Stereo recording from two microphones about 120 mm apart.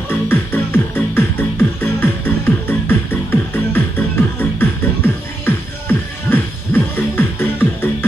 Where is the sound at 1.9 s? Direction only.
20° left (ahead or behind).